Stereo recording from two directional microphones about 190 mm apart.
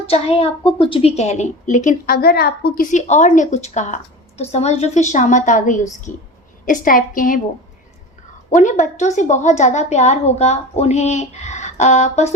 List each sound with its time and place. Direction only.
0.1 s a woman's voice: 30° left (ahead or behind); by 2.8 s 55° left (ahead or behind)
2.9 s a woman's voice: 40° left (ahead or behind)
8.4 s a woman's voice: 40° left (ahead or behind)